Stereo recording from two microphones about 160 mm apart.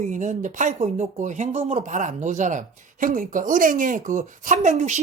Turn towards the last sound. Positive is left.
turn(degrees=-45)  # may be behind; listen again after turning